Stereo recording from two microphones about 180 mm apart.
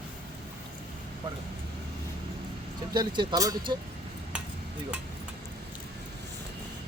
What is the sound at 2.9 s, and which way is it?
Speech, 25° right (ahead or behind).